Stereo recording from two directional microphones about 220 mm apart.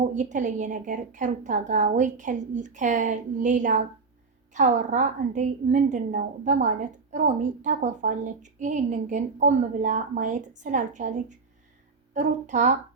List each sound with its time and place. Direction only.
0.0 s a woman's voice: 35° right (ahead or behind)